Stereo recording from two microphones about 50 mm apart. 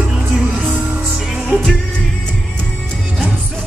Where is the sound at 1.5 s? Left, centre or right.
Right.